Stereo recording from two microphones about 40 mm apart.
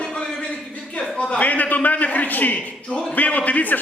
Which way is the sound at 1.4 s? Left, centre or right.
Left.